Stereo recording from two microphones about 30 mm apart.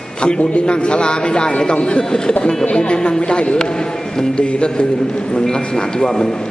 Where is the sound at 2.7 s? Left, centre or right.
Left.